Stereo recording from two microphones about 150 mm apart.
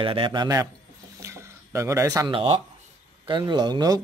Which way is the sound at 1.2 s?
20° right (ahead or behind).